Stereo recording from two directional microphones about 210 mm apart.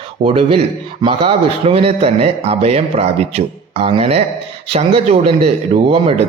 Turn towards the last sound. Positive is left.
turn(degrees=-30)  # may be behind; listen again after turning